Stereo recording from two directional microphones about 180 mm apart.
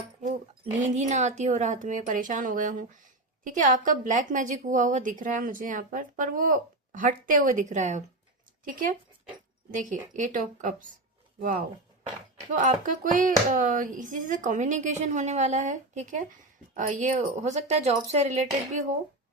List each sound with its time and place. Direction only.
0.2 s a woman's voice: 40° right (ahead or behind)